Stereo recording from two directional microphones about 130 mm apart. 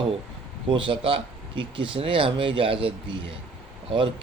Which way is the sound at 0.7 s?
40° right (ahead or behind).